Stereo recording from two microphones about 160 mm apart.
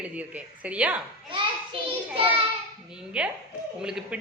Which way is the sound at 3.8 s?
5° right (ahead or behind).